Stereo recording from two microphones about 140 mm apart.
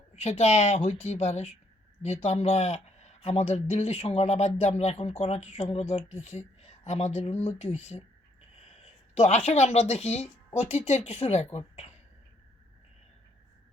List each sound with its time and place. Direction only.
0.2 s speech: 50° left (ahead or behind)